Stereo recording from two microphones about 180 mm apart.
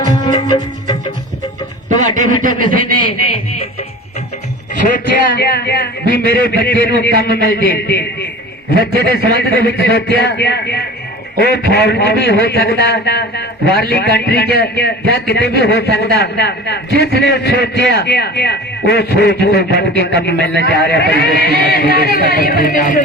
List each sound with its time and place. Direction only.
0.0 s music: 20° left (ahead or behind)
1.9 s a man's voice: 45° right (ahead or behind)
4.9 s a man's voice: 55° left (ahead or behind)
9.1 s a man's voice: 65° left (ahead or behind); by 23.0 s 50° left (ahead or behind)